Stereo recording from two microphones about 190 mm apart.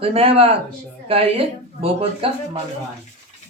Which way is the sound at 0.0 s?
30° right (ahead or behind).